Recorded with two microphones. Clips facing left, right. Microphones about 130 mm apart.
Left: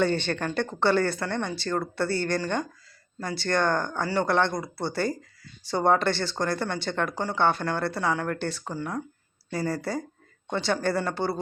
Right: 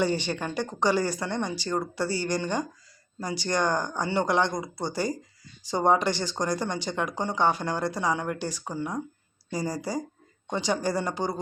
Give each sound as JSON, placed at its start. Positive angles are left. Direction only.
{"t": 0.0, "sound": "speech", "side_deg": -10}